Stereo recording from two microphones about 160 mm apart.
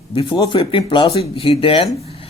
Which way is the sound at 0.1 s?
35° left (ahead or behind).